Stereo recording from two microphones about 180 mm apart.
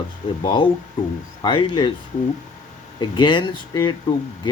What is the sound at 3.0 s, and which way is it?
Speech, 25° left (ahead or behind).